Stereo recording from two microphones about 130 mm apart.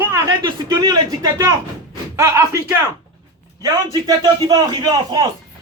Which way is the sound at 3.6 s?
30° right (ahead or behind).